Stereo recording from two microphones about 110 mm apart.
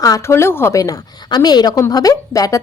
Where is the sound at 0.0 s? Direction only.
25° left (ahead or behind).